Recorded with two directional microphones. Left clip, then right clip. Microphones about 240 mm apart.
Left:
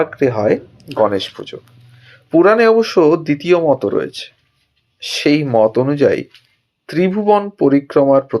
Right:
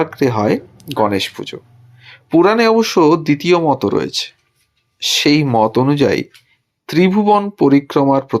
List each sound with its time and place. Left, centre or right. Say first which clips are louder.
0.0 s speech: left 1 dB; right